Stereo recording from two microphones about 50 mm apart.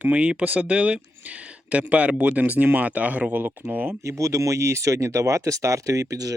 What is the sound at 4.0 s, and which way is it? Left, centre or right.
Speech, right.